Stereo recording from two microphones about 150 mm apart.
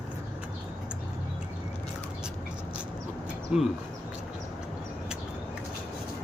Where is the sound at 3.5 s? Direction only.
5° right (ahead or behind).